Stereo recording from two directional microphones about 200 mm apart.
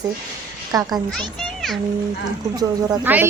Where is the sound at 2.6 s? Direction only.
20° right (ahead or behind).